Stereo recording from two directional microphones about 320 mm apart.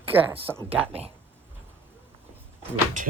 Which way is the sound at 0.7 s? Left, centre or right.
Centre.